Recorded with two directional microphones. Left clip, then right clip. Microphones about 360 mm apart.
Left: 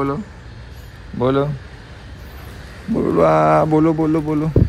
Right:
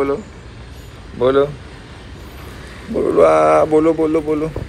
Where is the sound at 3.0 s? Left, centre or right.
Left.